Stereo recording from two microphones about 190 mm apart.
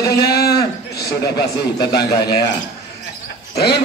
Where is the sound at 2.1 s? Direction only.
55° left (ahead or behind).